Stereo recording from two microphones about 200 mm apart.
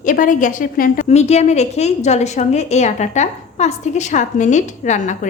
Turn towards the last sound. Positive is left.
turn(degrees=35)  # may be behind; listen again after turning